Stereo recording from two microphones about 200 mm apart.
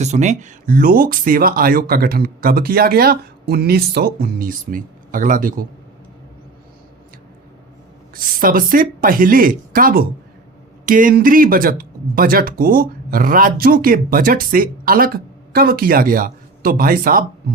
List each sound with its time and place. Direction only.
0.0 s speech: 35° right (ahead or behind)
8.1 s speech: 45° right (ahead or behind)